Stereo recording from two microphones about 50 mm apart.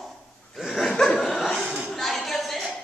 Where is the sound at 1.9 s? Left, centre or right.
Centre.